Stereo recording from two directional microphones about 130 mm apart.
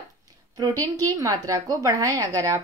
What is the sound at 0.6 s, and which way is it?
A woman's voice, 30° right (ahead or behind).